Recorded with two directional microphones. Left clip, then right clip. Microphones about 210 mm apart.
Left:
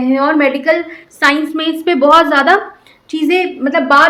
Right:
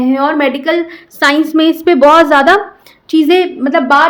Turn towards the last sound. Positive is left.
turn(degrees=-45)  # may be behind; listen again after turning